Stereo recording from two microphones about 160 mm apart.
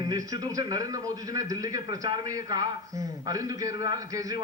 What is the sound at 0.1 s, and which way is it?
A man's voice, 25° right (ahead or behind).